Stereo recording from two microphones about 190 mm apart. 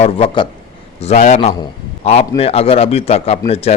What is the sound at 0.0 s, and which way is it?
A man's voice, 30° left (ahead or behind).